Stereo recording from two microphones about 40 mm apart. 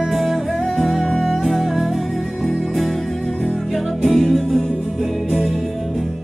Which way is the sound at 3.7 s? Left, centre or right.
Centre.